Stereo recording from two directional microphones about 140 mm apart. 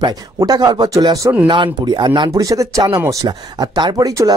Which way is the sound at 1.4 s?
35° right (ahead or behind).